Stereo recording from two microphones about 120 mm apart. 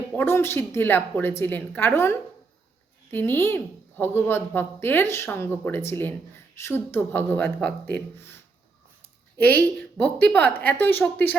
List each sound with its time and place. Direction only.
0.1 s a woman's voice: 20° left (ahead or behind)
9.4 s a woman's voice: 15° left (ahead or behind)